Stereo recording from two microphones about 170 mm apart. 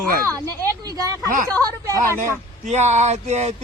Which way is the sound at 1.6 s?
20° right (ahead or behind).